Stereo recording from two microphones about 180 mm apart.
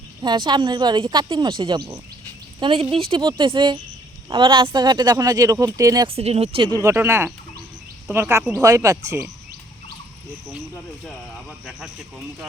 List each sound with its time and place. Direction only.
0.2 s speech: 25° right (ahead or behind)
6.1 s speech: 35° right (ahead or behind); by 9.0 s 15° right (ahead or behind)
11.0 s speech: centre (ahead or behind)